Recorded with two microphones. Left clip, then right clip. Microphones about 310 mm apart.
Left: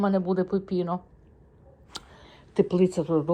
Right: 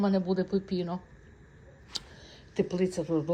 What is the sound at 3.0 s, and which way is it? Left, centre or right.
Speech, left.